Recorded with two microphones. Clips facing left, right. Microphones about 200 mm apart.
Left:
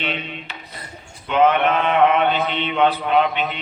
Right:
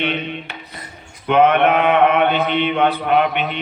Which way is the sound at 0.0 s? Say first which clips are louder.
Right 5 dB; 60° right (ahead or behind).